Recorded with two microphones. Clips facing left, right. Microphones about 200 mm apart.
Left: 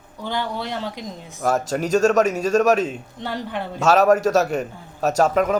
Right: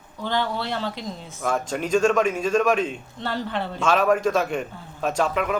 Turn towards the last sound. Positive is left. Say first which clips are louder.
# left 5 dB
turn(degrees=40)  # may be behind; listen again after turning